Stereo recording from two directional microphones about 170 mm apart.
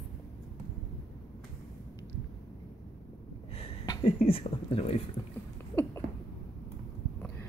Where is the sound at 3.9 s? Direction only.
30° left (ahead or behind).